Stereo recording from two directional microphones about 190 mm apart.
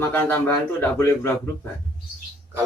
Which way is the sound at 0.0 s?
10° left (ahead or behind).